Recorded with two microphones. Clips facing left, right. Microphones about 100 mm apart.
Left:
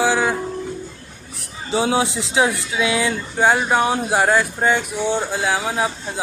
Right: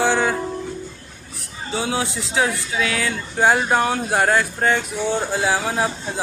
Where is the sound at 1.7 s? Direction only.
25° left (ahead or behind).